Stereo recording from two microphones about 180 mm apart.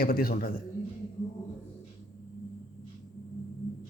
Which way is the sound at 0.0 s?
55° left (ahead or behind).